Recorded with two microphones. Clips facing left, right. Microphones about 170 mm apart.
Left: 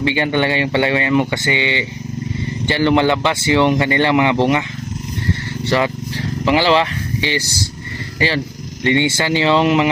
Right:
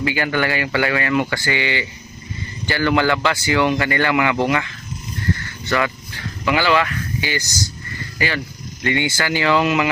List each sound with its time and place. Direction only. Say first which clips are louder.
0.0 s speech: left 3 dB; 25° left (ahead or behind)
5.6 s speech: left 3 dB; 30° left (ahead or behind)